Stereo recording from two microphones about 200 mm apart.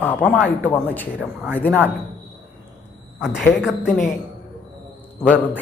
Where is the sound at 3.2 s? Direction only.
Centre (ahead or behind).